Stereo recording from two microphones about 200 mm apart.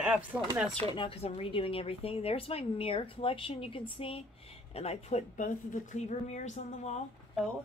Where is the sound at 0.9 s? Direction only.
30° left (ahead or behind).